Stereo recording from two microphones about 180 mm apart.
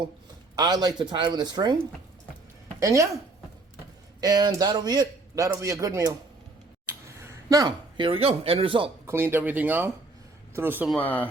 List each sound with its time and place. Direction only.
0.5 s a man's voice: 25° right (ahead or behind)
2.8 s speech: 15° right (ahead or behind)
4.2 s a man's voice: 20° right (ahead or behind)
7.2 s speech: 15° right (ahead or behind)
9.0 s speech: 10° right (ahead or behind)
10.8 s speech: 10° left (ahead or behind)